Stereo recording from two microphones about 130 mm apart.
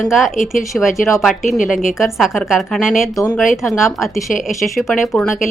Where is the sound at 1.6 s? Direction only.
90° left.